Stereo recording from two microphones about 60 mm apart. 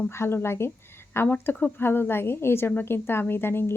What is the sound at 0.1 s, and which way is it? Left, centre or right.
A woman's voice, left.